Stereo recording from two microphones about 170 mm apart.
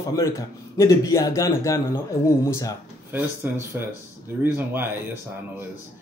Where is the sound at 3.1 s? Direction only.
15° right (ahead or behind).